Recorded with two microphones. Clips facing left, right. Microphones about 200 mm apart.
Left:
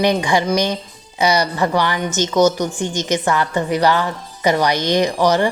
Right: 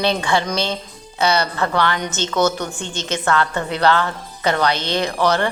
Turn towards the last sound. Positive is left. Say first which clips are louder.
# left 3 dB
turn(degrees=10)  # may be behind; listen again after turning